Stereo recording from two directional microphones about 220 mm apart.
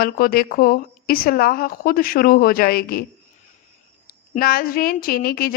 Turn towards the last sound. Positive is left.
turn(degrees=45)  # may be behind; listen again after turning